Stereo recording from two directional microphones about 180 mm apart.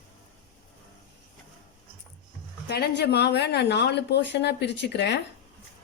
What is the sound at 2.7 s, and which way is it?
Speech, 60° left (ahead or behind).